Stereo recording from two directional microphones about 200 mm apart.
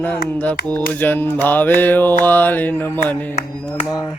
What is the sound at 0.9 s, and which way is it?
Speech, 10° left (ahead or behind).